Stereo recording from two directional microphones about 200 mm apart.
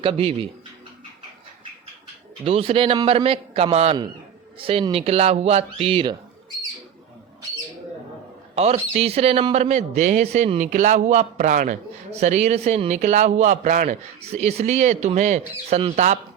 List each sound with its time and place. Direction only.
0.0 s speech: 25° right (ahead or behind)
2.4 s speech: 30° right (ahead or behind)
8.5 s a man's voice: 30° right (ahead or behind)